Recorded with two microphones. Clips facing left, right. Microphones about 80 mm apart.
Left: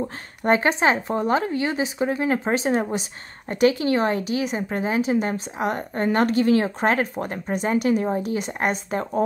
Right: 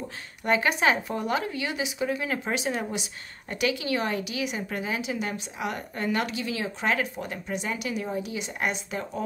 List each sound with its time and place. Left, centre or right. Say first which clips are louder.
0.0 s a woman's voice: left 7 dB; left